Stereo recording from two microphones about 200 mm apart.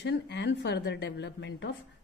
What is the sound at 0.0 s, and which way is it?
A woman's voice, 60° left (ahead or behind).